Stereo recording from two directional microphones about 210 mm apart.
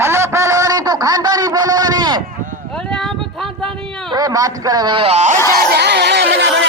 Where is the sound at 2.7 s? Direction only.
5° left (ahead or behind).